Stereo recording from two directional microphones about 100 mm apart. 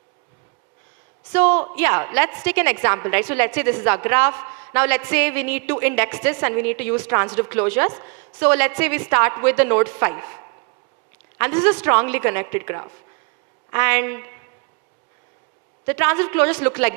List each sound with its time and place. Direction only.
1.3 s a woman's voice: 20° right (ahead or behind)
15.9 s a woman's voice: 20° right (ahead or behind)